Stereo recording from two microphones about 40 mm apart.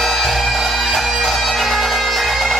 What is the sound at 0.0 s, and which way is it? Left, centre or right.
Bagpipes, centre.